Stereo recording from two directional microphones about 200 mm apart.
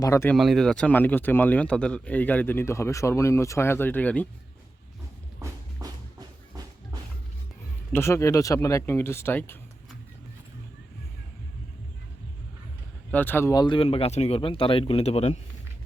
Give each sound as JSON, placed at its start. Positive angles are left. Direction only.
{"t": 0.0, "sound": "speech", "side_deg": 15}
{"t": 0.3, "sound": "speech", "side_deg": 0}
{"t": 5.4, "sound": "music", "side_deg": -20}
{"t": 7.9, "sound": "speech", "side_deg": 15}
{"t": 13.1, "sound": "speech", "side_deg": 10}